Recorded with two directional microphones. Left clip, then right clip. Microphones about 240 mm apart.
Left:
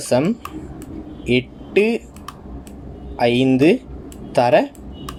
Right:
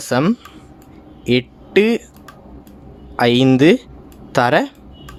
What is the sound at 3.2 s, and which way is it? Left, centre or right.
Speech, right.